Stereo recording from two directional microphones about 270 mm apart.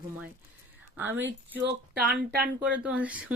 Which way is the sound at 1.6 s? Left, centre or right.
Right.